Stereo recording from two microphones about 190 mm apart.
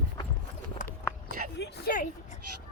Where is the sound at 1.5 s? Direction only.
60° left (ahead or behind).